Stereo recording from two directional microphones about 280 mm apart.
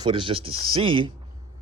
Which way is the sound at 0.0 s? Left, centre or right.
Centre.